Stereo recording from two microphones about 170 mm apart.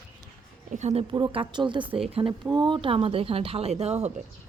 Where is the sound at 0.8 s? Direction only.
40° right (ahead or behind).